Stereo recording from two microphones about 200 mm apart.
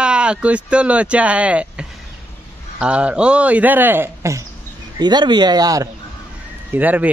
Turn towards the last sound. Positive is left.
turn(degrees=-10)  # may be behind; listen again after turning